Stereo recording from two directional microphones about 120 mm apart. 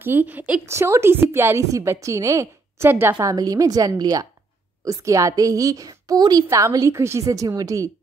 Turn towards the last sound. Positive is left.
turn(degrees=-30)  # may be behind; listen again after turning